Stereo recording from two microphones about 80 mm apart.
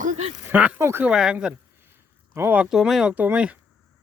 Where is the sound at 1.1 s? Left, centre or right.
Centre.